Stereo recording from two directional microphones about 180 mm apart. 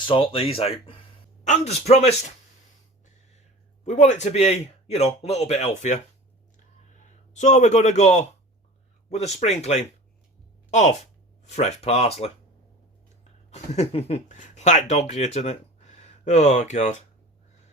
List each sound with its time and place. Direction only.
0.0 s a man's voice: 30° left (ahead or behind)
3.8 s a man's voice: 40° left (ahead or behind)
7.3 s a man's voice: 40° left (ahead or behind)
13.5 s speech: 35° left (ahead or behind)